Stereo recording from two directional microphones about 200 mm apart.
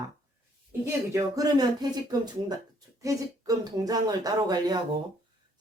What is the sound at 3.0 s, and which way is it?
Speech, 15° right (ahead or behind).